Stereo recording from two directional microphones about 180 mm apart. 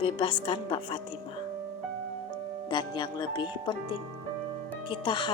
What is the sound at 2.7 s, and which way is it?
Speech, 25° left (ahead or behind).